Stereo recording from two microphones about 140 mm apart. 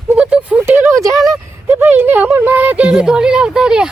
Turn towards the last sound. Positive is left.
turn(degrees=-5)  # may be behind; listen again after turning